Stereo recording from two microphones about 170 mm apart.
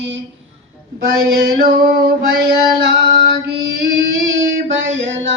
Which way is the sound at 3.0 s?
70° right (ahead or behind).